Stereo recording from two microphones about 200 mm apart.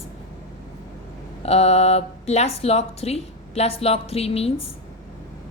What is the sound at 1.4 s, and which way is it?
Speech, 30° left (ahead or behind).